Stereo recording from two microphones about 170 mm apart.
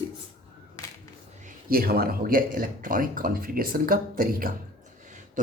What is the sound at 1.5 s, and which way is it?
Speech, 60° right (ahead or behind).